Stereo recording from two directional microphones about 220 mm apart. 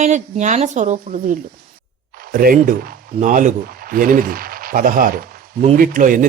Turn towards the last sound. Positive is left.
turn(degrees=-35)  # may be behind; listen again after turning